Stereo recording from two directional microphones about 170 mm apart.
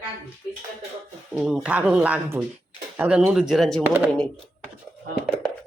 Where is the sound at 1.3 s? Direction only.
5° right (ahead or behind).